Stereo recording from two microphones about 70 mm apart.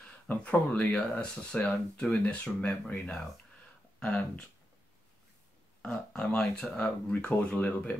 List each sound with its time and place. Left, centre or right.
0.3 s speech: left
5.8 s speech: centre